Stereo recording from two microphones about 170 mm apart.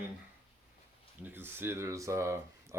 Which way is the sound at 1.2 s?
15° right (ahead or behind).